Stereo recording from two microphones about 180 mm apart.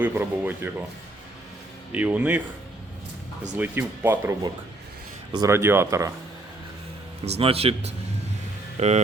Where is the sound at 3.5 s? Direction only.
10° right (ahead or behind).